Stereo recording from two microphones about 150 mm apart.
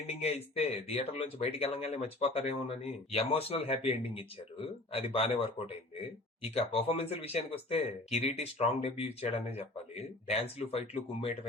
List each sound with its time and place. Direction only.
0.1 s speech: 45° left (ahead or behind)